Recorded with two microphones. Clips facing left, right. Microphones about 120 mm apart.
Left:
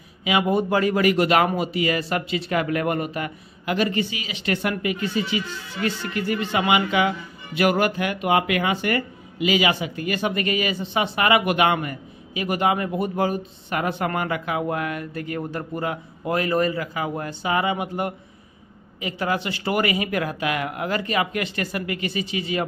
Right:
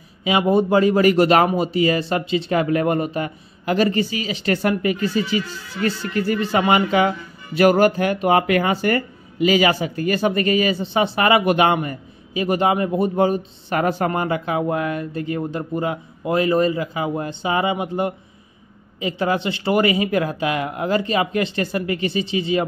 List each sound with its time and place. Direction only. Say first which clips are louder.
0.2 s speech: right 4 dB; 30° right (ahead or behind)
13.7 s speech: right 4 dB; 40° right (ahead or behind)